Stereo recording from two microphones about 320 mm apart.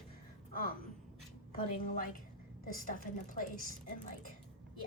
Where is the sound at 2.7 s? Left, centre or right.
Left.